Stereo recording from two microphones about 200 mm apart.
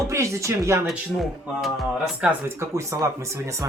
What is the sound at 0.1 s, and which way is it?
Speech, 15° right (ahead or behind).